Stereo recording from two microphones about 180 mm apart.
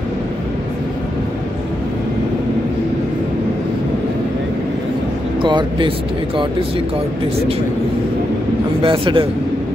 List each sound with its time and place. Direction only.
5.4 s speech: 25° right (ahead or behind)
8.8 s a man's voice: 30° right (ahead or behind)